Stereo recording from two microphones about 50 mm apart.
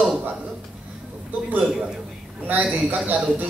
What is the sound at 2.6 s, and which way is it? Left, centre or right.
Speech, centre.